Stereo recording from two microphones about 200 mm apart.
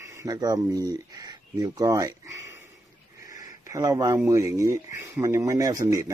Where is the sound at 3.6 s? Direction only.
15° right (ahead or behind).